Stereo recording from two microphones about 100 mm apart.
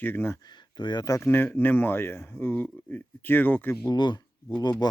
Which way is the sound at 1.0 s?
30° left (ahead or behind).